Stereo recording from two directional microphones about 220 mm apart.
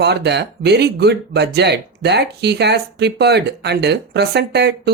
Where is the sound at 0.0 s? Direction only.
50° right (ahead or behind).